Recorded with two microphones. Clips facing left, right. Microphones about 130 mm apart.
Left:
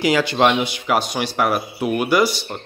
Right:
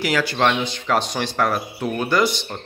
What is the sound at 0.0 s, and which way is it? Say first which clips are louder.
Speech: left 3 dB; 20° left (ahead or behind).